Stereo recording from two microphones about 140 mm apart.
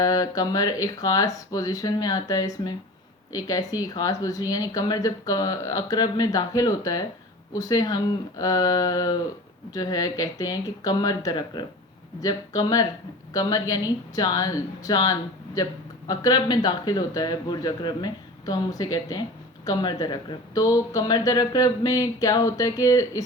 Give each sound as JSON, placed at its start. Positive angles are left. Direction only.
{"t": 0.0, "sound": "speech", "side_deg": 25}